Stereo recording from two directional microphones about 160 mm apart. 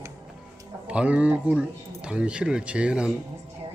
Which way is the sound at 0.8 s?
5° right (ahead or behind).